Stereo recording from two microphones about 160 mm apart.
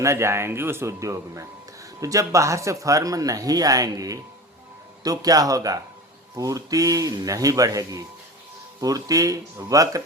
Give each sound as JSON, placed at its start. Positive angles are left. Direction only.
{"t": 0.0, "sound": "speech", "side_deg": -15}